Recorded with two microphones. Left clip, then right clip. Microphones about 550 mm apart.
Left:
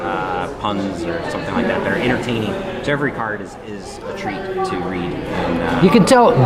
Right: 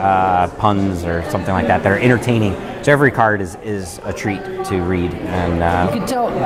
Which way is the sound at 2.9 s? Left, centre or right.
Right.